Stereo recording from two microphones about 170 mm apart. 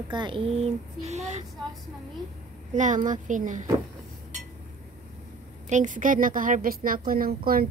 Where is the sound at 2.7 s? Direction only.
50° right (ahead or behind).